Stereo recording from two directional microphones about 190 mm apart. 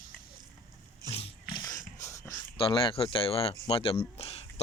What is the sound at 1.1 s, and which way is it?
Dog, 30° left (ahead or behind).